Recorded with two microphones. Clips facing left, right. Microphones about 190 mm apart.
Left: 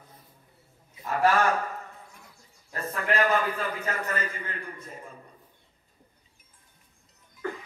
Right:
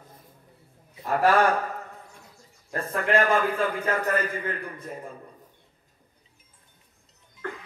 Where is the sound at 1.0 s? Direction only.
55° right (ahead or behind).